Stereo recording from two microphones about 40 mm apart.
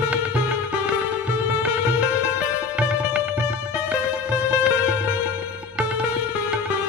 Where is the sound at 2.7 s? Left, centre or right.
Right.